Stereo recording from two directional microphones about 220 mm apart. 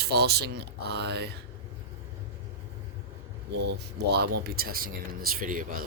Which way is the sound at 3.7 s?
50° right (ahead or behind).